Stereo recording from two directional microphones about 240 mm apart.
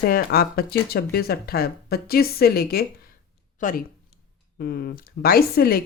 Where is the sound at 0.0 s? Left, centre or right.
Left.